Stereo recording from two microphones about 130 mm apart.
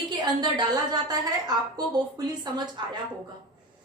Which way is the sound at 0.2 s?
30° right (ahead or behind).